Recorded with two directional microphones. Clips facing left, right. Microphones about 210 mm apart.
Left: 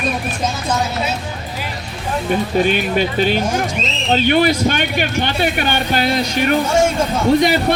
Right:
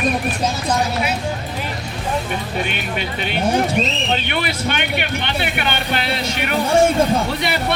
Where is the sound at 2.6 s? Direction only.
35° left (ahead or behind).